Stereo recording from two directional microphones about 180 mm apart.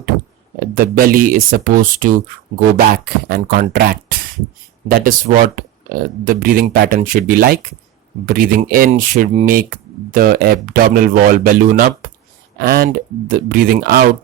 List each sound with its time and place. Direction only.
0.8 s speech: 50° right (ahead or behind)
10.1 s speech: 50° right (ahead or behind)